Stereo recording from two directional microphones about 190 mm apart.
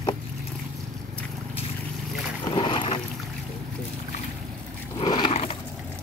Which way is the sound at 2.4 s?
25° left (ahead or behind).